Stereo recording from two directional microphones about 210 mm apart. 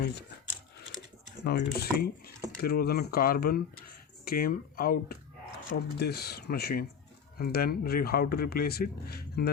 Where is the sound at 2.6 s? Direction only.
45° left (ahead or behind).